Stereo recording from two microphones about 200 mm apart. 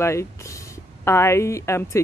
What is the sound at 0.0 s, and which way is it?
A woman's voice, 15° left (ahead or behind).